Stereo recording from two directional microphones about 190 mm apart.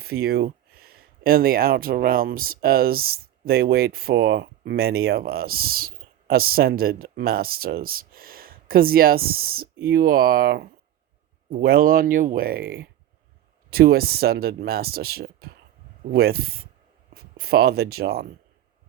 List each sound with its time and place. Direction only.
0.0 s speech: 55° right (ahead or behind)